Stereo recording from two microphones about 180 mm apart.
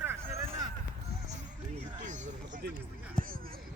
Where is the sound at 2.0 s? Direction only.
45° right (ahead or behind).